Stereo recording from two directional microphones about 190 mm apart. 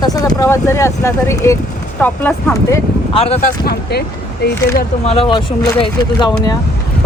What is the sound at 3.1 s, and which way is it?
Speech, 30° left (ahead or behind).